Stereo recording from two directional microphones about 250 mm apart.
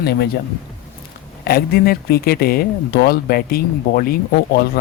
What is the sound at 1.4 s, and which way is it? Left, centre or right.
Speech, left.